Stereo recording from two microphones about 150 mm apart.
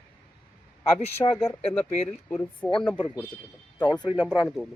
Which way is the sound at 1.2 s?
25° left (ahead or behind).